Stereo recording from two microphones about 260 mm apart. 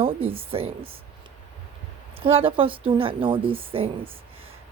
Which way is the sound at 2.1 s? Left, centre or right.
Right.